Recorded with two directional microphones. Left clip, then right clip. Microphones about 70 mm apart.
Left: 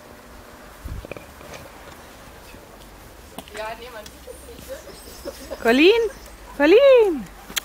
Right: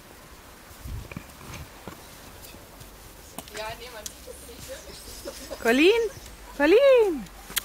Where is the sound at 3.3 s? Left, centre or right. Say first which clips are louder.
Left 4 dB; centre.